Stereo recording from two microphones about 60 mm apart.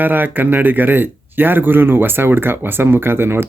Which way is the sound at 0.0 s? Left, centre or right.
Right.